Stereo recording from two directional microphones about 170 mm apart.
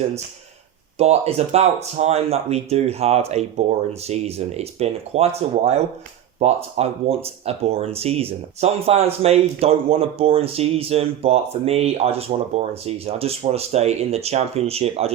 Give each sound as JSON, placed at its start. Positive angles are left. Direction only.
{"t": 0.9, "sound": "speech", "side_deg": -40}